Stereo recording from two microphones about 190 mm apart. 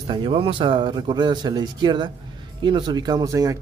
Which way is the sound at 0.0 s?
25° right (ahead or behind).